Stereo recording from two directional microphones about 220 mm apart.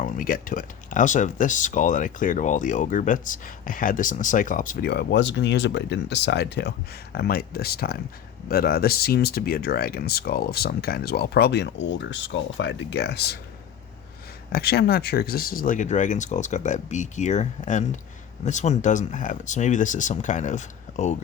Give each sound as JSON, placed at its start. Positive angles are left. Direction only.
{"t": 0.0, "sound": "speech", "side_deg": 40}
{"t": 14.5, "sound": "speech", "side_deg": 45}